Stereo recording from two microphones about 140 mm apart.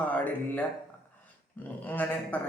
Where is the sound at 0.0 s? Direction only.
10° left (ahead or behind).